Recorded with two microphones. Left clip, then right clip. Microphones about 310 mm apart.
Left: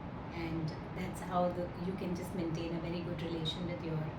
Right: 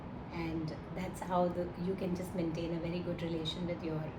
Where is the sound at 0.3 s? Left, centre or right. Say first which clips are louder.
Right 2 dB; centre.